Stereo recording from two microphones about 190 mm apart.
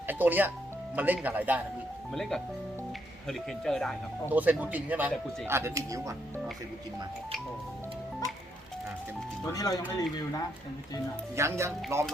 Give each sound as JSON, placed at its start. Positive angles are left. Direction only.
{"t": 0.1, "sound": "speech", "side_deg": -10}
{"t": 2.1, "sound": "speech", "side_deg": 0}
{"t": 4.3, "sound": "speech", "side_deg": -10}
{"t": 9.5, "sound": "speech", "side_deg": 20}
{"t": 11.3, "sound": "speech", "side_deg": -15}